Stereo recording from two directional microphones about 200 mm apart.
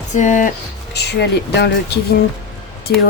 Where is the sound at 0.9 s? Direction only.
55° left (ahead or behind).